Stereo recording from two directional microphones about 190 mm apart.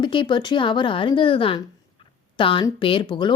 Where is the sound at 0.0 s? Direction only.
25° left (ahead or behind).